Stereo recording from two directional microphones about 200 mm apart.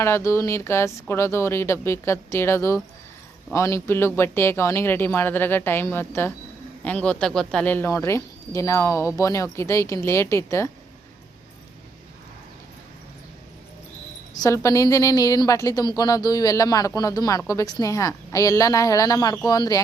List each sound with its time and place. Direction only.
0.0 s speech: 15° left (ahead or behind)
14.3 s speech: 15° left (ahead or behind)